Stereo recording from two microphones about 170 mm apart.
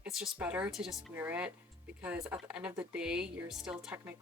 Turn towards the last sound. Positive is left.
turn(degrees=-10)  # may be behind; listen again after turning